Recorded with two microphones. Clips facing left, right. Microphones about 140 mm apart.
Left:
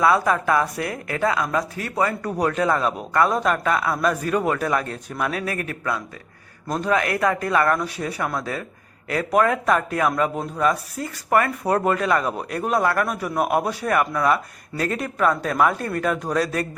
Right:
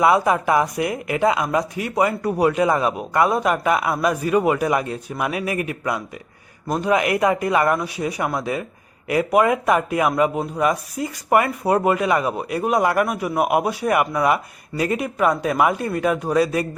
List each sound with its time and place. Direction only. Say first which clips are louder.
0.0 s speech: right 2 dB; 15° right (ahead or behind)